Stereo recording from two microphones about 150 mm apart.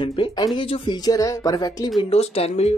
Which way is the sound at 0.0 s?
35° left (ahead or behind).